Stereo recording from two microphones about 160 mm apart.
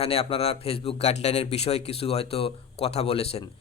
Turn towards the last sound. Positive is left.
turn(degrees=40)  # may be behind; listen again after turning